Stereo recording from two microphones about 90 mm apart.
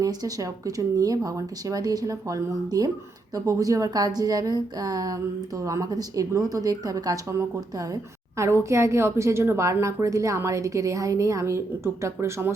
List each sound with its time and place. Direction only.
0.0 s a woman's voice: 45° right (ahead or behind)